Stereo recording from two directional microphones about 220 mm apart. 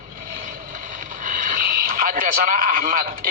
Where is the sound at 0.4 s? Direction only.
40° right (ahead or behind).